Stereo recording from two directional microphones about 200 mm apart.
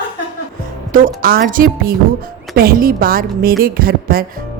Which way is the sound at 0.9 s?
45° right (ahead or behind).